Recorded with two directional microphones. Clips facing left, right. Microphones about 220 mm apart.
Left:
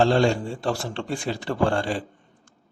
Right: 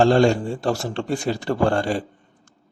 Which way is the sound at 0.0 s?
45° right (ahead or behind).